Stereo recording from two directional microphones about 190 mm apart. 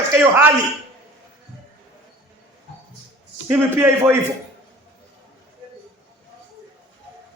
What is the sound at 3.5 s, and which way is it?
Speech, 10° right (ahead or behind).